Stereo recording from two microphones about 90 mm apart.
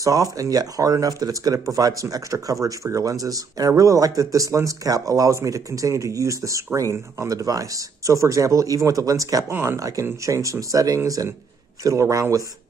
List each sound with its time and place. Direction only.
0.0 s speech: 40° right (ahead or behind)